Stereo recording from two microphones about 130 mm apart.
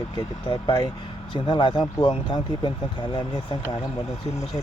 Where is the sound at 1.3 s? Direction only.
35° left (ahead or behind).